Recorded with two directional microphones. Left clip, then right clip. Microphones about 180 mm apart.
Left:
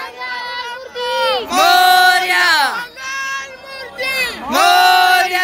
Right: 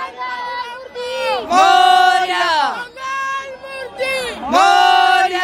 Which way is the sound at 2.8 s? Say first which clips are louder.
Even; 65° right (ahead or behind).